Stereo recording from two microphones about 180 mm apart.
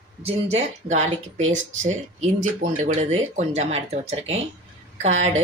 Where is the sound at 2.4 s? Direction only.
40° right (ahead or behind).